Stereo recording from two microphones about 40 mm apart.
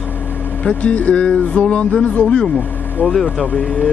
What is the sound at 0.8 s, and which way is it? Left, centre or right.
Speech, left.